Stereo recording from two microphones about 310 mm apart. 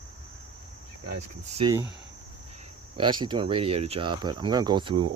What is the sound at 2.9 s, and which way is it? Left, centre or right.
Speech, centre.